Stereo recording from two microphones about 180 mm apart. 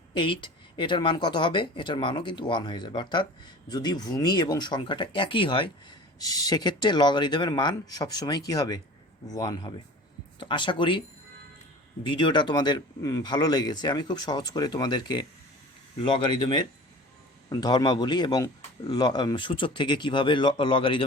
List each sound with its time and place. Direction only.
0.1 s speech: 30° left (ahead or behind)
12.0 s speech: 25° left (ahead or behind)